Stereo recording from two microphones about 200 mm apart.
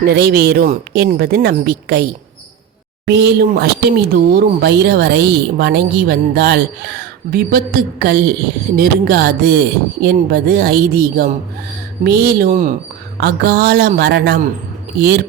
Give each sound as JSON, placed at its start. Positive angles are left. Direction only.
{"t": 0.0, "sound": "a woman's voice", "side_deg": -55}
{"t": 13.1, "sound": "a woman's voice", "side_deg": -55}